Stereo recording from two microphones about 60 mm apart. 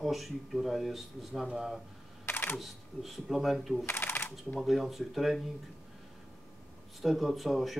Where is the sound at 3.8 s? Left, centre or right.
Left.